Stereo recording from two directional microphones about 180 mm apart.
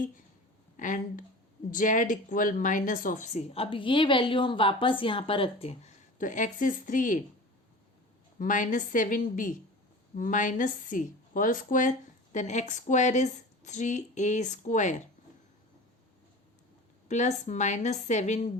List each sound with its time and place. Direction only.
0.8 s speech: 45° left (ahead or behind)
6.1 s speech: 45° left (ahead or behind)
8.4 s speech: 45° left (ahead or behind)
17.1 s speech: 40° left (ahead or behind)